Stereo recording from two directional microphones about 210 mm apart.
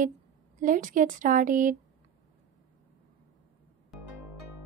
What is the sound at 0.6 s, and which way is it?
Speech, 40° right (ahead or behind).